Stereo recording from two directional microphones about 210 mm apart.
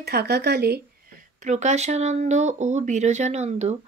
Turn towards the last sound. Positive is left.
turn(degrees=-30)  # may be behind; listen again after turning